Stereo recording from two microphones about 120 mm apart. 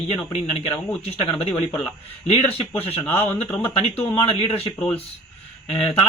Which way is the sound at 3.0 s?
15° left (ahead or behind).